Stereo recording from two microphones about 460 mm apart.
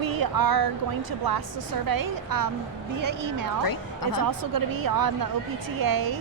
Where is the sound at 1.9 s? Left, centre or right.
Right.